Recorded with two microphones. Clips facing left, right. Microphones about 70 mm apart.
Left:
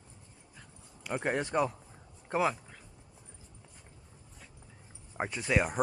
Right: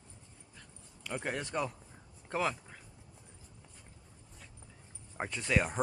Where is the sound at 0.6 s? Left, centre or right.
Centre.